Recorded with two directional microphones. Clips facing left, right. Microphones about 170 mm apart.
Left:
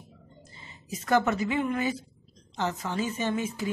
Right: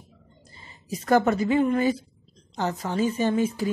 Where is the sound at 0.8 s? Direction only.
35° right (ahead or behind).